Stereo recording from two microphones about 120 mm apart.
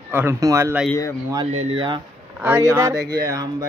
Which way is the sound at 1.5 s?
50° right (ahead or behind).